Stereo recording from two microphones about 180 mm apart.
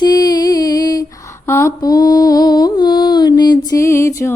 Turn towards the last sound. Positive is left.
turn(degrees=15)  # may be behind; listen again after turning